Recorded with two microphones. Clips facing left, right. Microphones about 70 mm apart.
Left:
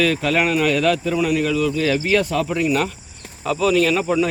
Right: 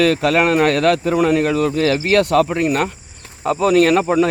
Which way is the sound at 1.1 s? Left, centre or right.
Right.